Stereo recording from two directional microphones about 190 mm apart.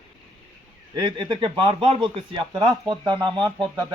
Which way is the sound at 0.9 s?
25° right (ahead or behind).